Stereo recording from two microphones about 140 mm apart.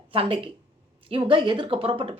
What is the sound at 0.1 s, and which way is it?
A woman's voice, 40° right (ahead or behind).